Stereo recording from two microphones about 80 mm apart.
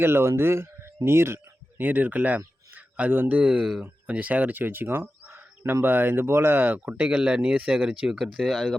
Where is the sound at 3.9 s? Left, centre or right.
Centre.